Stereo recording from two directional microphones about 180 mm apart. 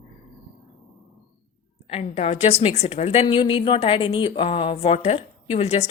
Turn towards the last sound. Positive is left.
turn(degrees=35)  # may be behind; listen again after turning